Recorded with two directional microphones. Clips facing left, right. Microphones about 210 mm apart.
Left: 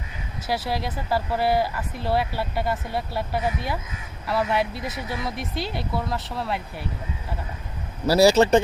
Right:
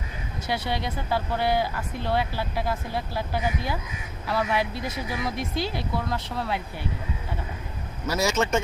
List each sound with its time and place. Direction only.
0.4 s speech: centre (ahead or behind)
8.0 s a man's voice: 35° left (ahead or behind)